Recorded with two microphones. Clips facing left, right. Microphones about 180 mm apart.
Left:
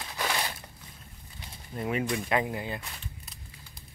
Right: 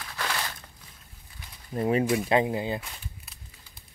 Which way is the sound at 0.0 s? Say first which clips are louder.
Left 1 dB; 20° left (ahead or behind).